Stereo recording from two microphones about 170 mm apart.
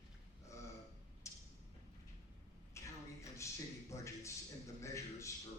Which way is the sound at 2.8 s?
15° left (ahead or behind).